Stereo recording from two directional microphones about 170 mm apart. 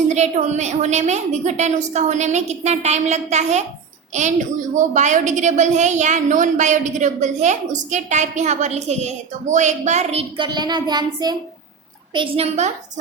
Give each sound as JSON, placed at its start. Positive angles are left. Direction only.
{"t": 0.1, "sound": "a woman's voice", "side_deg": -45}